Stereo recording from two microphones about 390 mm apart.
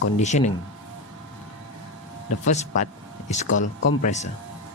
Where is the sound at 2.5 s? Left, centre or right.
Centre.